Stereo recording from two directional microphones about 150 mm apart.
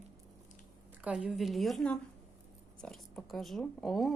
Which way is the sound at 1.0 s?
10° right (ahead or behind).